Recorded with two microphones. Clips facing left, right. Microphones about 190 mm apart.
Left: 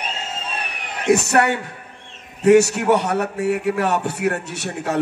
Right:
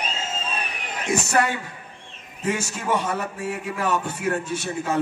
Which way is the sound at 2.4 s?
70° left (ahead or behind).